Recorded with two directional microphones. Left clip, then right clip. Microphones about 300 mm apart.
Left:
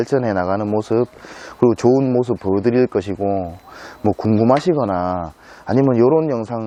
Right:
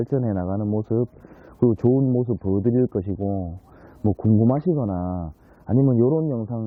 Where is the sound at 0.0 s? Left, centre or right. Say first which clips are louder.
Left 8 dB; centre.